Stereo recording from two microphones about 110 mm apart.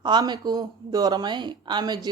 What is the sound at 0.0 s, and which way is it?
A woman's voice, 40° right (ahead or behind).